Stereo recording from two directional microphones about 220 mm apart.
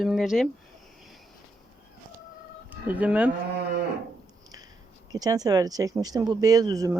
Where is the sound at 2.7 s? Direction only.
5° right (ahead or behind).